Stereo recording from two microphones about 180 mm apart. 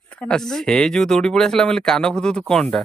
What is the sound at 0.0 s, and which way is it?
Speech, 5° left (ahead or behind).